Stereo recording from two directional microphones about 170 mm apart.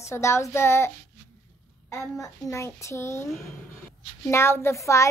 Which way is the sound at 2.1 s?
20° left (ahead or behind).